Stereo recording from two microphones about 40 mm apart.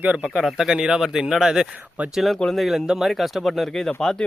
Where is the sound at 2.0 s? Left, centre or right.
Right.